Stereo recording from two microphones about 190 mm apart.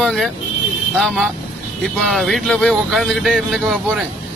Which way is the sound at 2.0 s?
Centre (ahead or behind).